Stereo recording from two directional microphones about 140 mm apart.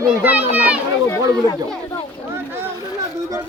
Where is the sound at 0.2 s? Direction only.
10° right (ahead or behind).